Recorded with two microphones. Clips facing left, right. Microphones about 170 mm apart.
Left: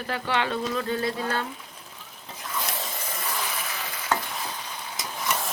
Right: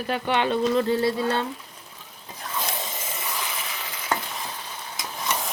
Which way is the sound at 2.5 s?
20° right (ahead or behind).